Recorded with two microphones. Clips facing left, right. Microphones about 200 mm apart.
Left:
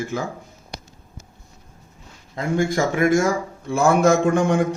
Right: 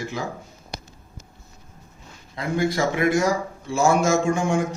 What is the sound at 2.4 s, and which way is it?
A man's voice, 45° left (ahead or behind).